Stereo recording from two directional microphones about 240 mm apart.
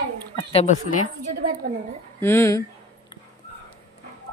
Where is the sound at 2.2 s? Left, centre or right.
Centre.